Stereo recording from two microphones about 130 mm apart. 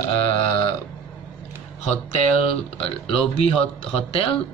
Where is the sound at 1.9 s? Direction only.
55° left (ahead or behind).